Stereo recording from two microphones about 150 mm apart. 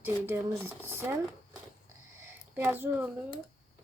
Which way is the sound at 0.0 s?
15° right (ahead or behind).